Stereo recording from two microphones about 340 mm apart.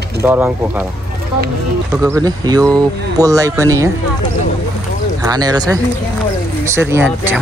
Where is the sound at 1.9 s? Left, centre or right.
Centre.